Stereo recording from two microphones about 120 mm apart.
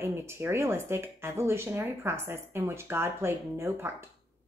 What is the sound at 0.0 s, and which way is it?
A woman's voice, 20° right (ahead or behind).